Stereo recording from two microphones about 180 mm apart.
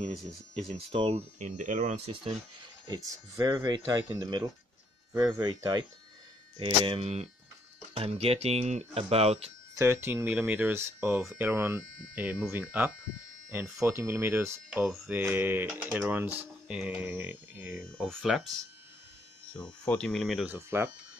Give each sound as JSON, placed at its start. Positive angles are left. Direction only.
{"t": 0.2, "sound": "speech", "side_deg": 0}
{"t": 0.8, "sound": "speech", "side_deg": -30}
{"t": 2.9, "sound": "speech", "side_deg": -20}
{"t": 9.8, "sound": "speech", "side_deg": -15}
{"t": 17.9, "sound": "speech", "side_deg": 0}
{"t": 20.4, "sound": "speech", "side_deg": -15}